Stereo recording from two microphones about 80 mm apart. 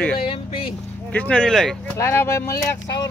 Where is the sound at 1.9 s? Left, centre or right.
Left.